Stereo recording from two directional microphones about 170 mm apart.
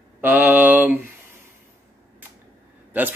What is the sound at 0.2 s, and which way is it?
Mantra, 10° right (ahead or behind).